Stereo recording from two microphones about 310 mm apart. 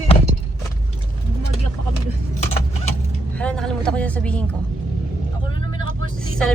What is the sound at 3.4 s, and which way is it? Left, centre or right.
Speech, centre.